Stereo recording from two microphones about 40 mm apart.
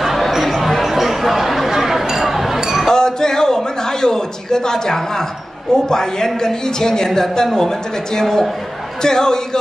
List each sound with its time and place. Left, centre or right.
0.0 s chatter: centre
2.9 s a sound: centre
5.9 s a woman's voice: centre